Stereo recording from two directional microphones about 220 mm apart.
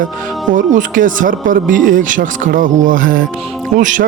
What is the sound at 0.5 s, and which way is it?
Speech, 35° right (ahead or behind).